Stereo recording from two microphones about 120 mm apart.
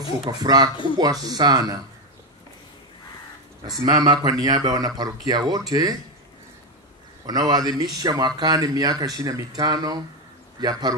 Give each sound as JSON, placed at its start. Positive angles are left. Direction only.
{"t": 0.3, "sound": "speech", "side_deg": -35}
{"t": 3.6, "sound": "speech", "side_deg": -35}
{"t": 7.2, "sound": "speech", "side_deg": -35}